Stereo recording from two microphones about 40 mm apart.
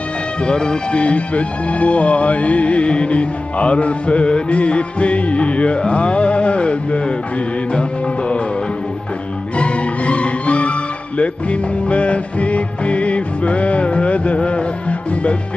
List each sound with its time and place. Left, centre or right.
0.5 s speech: left
5.8 s a sound: left
9.6 s music: left